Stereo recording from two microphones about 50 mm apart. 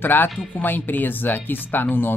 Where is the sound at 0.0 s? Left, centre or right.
Left.